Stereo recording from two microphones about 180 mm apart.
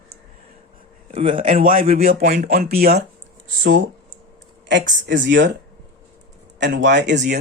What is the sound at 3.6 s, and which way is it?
Speech, 90° right.